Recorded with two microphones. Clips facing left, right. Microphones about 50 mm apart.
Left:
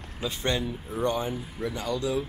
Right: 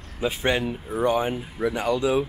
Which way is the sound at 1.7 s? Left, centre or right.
Right.